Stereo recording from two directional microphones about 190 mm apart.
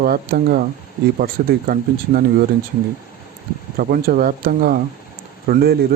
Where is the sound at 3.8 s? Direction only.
50° right (ahead or behind).